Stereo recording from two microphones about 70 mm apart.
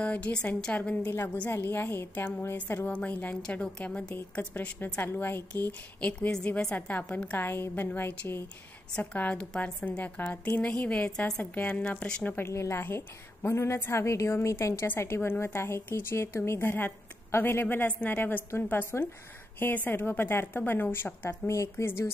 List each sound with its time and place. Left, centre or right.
0.0 s a woman's voice: centre
3.4 s a woman's voice: centre
4.4 s a woman's voice: left
11.5 s a woman's voice: left
12.3 s a woman's voice: left
21.3 s speech: left